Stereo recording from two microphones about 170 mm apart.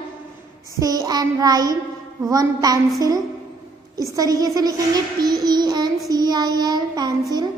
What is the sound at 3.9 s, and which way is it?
A child's voice, 20° right (ahead or behind).